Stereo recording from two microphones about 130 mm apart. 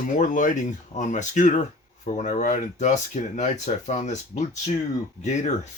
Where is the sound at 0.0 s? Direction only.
80° left.